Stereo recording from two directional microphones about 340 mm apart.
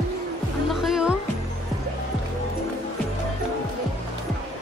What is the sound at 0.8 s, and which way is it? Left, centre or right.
Music, centre.